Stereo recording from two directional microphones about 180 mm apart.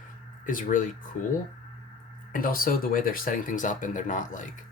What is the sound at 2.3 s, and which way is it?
Speech, 50° left (ahead or behind).